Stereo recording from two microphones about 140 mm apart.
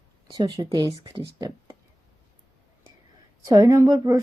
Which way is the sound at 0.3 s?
30° right (ahead or behind).